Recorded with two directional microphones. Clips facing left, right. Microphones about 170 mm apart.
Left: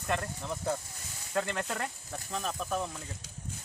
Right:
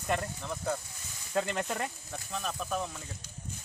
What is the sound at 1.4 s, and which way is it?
Speech, 15° right (ahead or behind).